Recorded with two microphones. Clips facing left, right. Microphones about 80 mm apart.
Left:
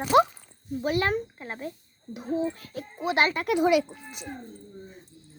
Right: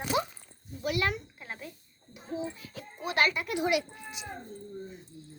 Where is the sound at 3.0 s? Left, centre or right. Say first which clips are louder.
Left 4 dB; left.